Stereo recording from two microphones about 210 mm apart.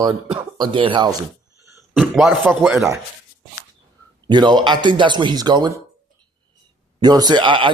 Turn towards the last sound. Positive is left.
turn(degrees=-25)  # may be behind; listen again after turning